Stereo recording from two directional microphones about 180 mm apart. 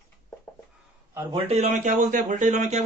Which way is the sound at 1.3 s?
40° right (ahead or behind).